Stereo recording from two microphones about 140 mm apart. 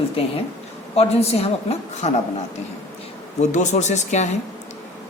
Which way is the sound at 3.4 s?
60° left (ahead or behind).